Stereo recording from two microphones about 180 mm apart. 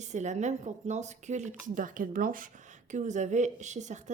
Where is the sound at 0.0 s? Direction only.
40° right (ahead or behind).